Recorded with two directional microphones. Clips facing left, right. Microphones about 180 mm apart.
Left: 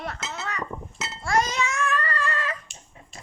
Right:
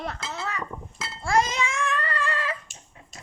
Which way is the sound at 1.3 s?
30° right (ahead or behind).